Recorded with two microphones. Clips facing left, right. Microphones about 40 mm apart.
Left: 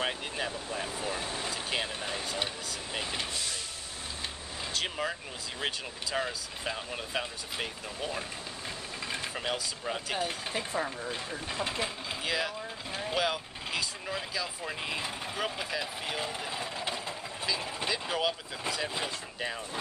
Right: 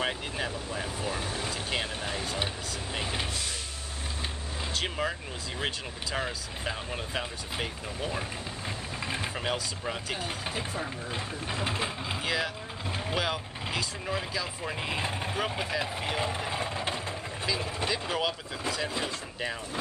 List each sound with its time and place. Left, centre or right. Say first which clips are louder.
0.0 s speech: right 1 dB; centre
4.7 s speech: right 2 dB; centre
6.1 s speech: even; centre
15.0 s speech: right 3 dB; right
17.5 s speech: right 2 dB; centre